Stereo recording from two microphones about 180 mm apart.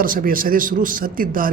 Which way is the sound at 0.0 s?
50° right (ahead or behind).